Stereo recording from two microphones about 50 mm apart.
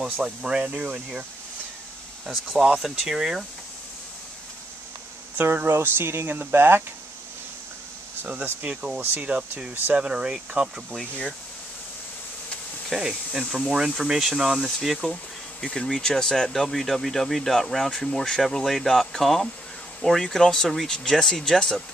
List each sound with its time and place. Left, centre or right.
0.0 s speech: centre
2.3 s speech: centre
2.6 s speech: centre
5.4 s speech: right
8.6 s speech: right
9.3 s speech: right
9.9 s speech: right
12.9 s speech: centre
15.6 s speech: centre